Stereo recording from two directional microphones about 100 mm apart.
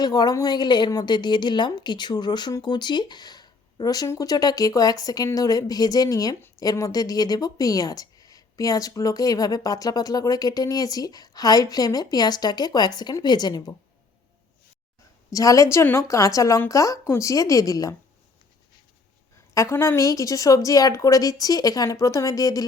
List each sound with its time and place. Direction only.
0.0 s a woman's voice: 40° left (ahead or behind)
15.3 s speech: 35° left (ahead or behind)
19.5 s speech: 30° left (ahead or behind)